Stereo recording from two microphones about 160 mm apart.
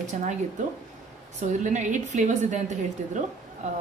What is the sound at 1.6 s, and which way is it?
Speech, 50° right (ahead or behind).